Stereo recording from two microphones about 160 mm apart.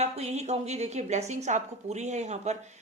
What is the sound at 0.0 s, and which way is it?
A woman's voice, 40° right (ahead or behind).